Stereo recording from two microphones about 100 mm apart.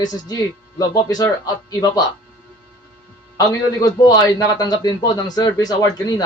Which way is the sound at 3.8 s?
40° left (ahead or behind).